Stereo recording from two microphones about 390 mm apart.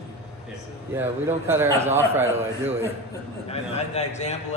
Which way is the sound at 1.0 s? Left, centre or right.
Centre.